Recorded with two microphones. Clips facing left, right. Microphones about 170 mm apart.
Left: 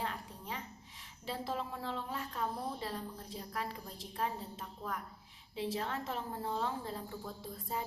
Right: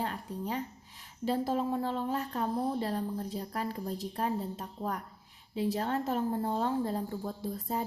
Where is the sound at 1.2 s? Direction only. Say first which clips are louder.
Right 9 dB; 45° right (ahead or behind).